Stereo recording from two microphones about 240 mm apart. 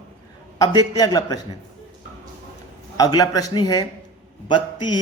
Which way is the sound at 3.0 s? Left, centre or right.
Centre.